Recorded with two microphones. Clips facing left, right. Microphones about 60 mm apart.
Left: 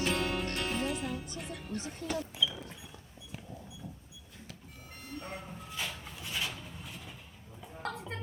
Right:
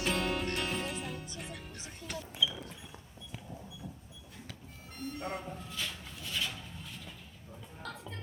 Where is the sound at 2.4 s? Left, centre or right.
Centre.